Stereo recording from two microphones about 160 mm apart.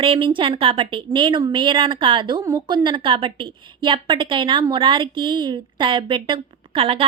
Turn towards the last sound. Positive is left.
turn(degrees=-35)  # may be behind; listen again after turning